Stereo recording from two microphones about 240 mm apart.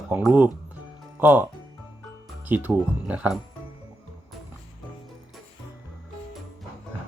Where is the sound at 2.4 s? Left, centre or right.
Centre.